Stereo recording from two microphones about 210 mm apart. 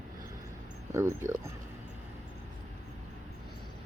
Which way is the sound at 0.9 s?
15° right (ahead or behind).